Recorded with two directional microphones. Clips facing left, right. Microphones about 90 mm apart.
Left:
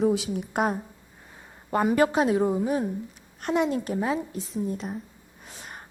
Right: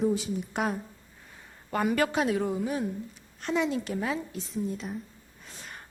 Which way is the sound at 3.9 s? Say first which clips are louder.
Left 4 dB; 25° left (ahead or behind).